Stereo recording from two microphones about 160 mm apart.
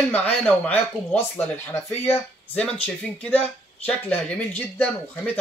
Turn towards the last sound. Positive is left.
turn(degrees=10)  # may be behind; listen again after turning